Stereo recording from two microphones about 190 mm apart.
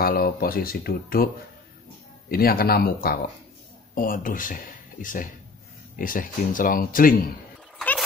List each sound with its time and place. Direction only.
0.0 s speech: 50° left (ahead or behind)